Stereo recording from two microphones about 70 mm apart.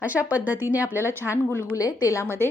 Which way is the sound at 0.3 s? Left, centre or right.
Right.